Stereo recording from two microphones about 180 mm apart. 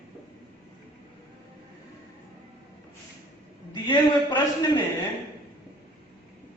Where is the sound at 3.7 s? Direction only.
25° left (ahead or behind).